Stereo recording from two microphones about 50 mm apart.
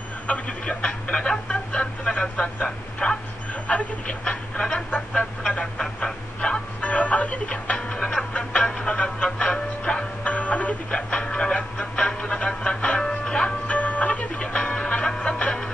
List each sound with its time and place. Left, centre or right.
0.3 s speech: left
5.5 s a sound: left
6.8 s music: left
7.7 s music: centre
8.3 s music: left
13.7 s music: left